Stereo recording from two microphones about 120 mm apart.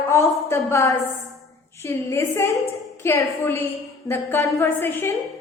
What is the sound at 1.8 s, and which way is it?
A woman's voice, 20° left (ahead or behind).